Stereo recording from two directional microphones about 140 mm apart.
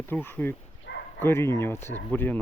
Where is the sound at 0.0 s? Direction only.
15° left (ahead or behind).